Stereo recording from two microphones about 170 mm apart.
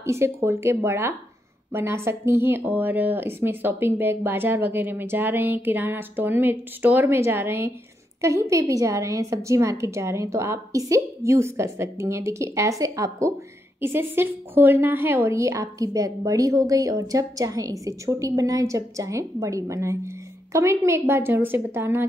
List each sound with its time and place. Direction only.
0.0 s a woman's voice: 15° right (ahead or behind)